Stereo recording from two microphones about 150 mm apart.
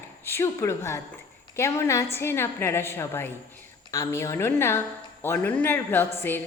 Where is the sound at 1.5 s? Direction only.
20° left (ahead or behind).